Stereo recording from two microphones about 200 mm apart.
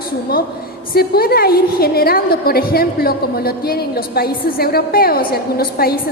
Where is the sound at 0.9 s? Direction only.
50° left (ahead or behind).